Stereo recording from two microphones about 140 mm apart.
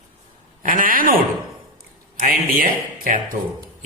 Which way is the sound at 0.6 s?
70° right (ahead or behind).